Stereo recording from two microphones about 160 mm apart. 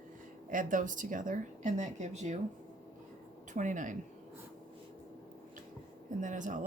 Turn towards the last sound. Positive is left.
turn(degrees=-50)  # may be behind; listen again after turning